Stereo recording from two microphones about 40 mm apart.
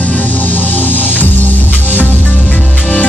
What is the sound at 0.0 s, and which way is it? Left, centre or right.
Music, left.